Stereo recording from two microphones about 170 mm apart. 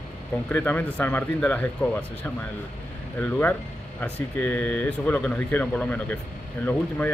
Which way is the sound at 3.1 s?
10° left (ahead or behind).